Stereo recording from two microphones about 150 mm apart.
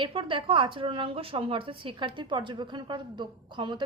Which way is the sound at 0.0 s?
35° right (ahead or behind).